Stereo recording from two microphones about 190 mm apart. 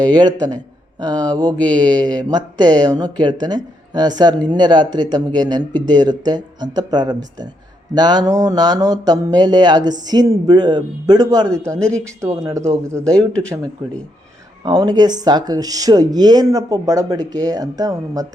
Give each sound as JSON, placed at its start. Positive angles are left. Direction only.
{"t": 0.0, "sound": "mantra", "side_deg": -20}
{"t": 0.9, "sound": "speech", "side_deg": -20}
{"t": 1.5, "sound": "mantra", "side_deg": 5}
{"t": 2.3, "sound": "mantra", "side_deg": -20}
{"t": 11.8, "sound": "speech", "side_deg": 5}
{"t": 12.2, "sound": "speech", "side_deg": -20}
{"t": 14.6, "sound": "mantra", "side_deg": -20}